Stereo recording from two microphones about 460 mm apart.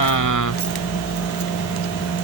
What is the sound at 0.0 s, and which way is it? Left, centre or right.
Vehicle, left.